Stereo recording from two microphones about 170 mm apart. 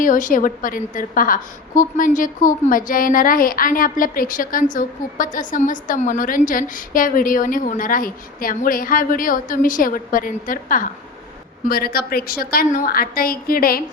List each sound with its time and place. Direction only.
0.0 s a woman's voice: 50° left (ahead or behind)